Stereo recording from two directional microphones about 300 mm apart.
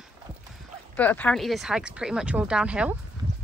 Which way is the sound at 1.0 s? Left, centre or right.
Centre.